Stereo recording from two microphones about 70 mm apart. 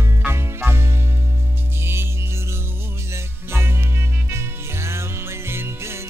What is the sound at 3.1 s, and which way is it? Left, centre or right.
Music, right.